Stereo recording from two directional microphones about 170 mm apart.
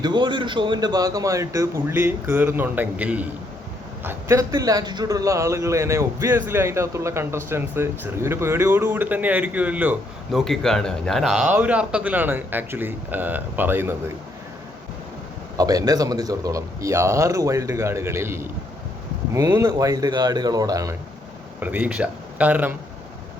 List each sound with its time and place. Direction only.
0.0 s a man's voice: 25° right (ahead or behind); by 10.4 s 10° right (ahead or behind)
10.4 s a man's voice: centre (ahead or behind)
15.5 s a man's voice: 20° right (ahead or behind)
21.6 s a man's voice: 10° right (ahead or behind)